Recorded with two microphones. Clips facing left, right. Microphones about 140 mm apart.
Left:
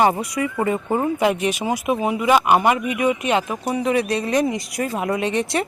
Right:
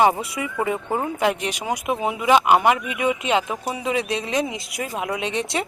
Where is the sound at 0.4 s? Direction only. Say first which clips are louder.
Left 5 dB; 10° right (ahead or behind).